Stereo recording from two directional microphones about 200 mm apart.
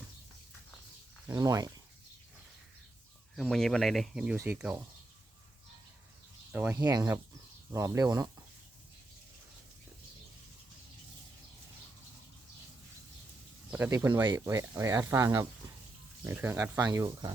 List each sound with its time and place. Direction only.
1.3 s speech: 15° right (ahead or behind)
3.3 s speech: centre (ahead or behind)
6.5 s speech: 10° right (ahead or behind)
13.7 s speech: 10° right (ahead or behind)